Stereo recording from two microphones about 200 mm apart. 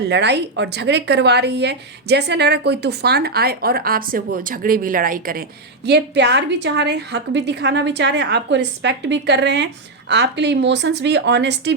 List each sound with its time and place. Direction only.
0.0 s speech: 55° right (ahead or behind)
5.8 s speech: 60° right (ahead or behind)